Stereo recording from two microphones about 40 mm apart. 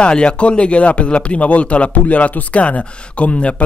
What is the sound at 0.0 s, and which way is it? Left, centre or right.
Speech, left.